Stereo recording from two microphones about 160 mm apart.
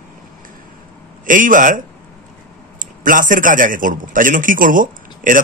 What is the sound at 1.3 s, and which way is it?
A man's voice, 55° right (ahead or behind).